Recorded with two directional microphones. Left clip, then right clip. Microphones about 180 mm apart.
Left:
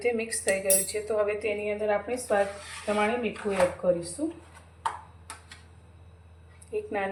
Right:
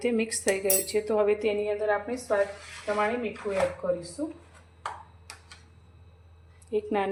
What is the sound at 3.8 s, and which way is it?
Speech, 20° right (ahead or behind).